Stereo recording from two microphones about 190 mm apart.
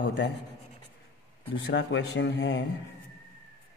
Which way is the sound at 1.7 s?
65° left (ahead or behind).